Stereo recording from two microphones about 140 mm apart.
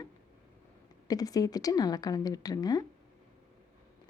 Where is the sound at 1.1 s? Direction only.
25° left (ahead or behind).